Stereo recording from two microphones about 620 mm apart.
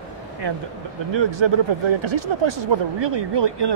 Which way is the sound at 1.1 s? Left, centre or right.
Right.